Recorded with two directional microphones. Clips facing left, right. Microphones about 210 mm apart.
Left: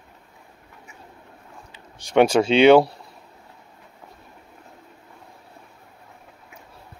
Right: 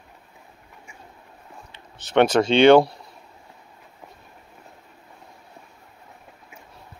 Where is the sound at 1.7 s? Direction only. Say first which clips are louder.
Left 1 dB; 10° left (ahead or behind).